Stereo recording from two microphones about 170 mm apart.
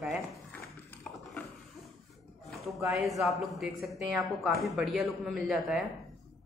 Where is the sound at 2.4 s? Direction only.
Centre (ahead or behind).